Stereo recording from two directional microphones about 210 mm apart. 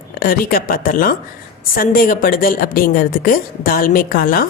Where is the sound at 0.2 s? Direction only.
45° left (ahead or behind).